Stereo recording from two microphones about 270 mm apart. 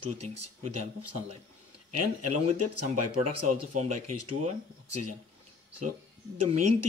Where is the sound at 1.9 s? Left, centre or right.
Right.